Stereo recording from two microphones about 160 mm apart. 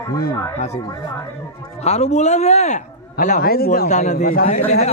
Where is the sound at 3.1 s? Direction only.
60° left (ahead or behind).